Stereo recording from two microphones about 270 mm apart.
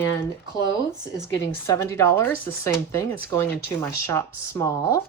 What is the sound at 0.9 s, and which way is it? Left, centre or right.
Speech, centre.